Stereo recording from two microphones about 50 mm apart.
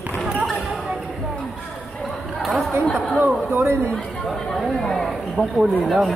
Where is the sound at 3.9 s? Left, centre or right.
Centre.